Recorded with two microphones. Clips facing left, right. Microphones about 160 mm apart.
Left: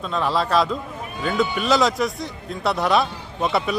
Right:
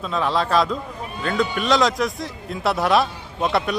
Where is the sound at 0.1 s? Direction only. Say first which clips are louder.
Even; centre (ahead or behind).